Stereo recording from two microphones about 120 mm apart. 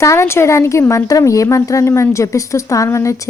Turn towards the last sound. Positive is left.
turn(degrees=25)  # may be behind; listen again after turning